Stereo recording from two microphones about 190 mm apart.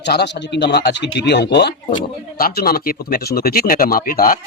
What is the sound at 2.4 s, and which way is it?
Speech, 50° left (ahead or behind).